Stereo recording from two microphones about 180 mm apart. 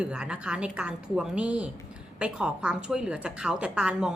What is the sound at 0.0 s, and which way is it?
A woman's voice, 5° right (ahead or behind).